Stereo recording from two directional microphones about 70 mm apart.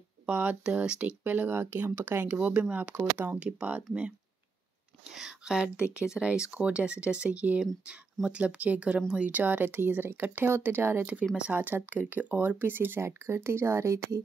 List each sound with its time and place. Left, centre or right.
0.3 s speech: right
1.2 s speech: right
5.1 s speech: centre; by 11.0 s right
11.0 s speech: centre; by 14.2 s right